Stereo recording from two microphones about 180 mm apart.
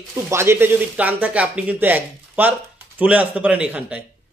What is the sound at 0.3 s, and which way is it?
Speech, 15° right (ahead or behind).